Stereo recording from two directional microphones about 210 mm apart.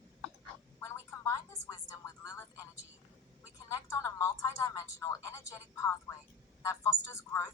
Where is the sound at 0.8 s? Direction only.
15° left (ahead or behind).